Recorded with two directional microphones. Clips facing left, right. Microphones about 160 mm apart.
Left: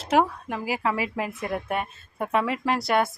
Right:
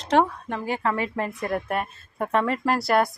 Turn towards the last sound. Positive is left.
turn(degrees=0)  # may be behind; listen again after turning